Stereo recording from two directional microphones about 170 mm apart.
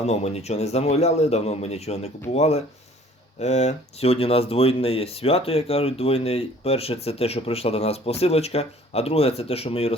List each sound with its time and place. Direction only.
0.0 s speech: 40° left (ahead or behind)